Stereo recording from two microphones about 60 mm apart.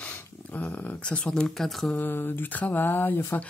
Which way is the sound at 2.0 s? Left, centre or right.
Left.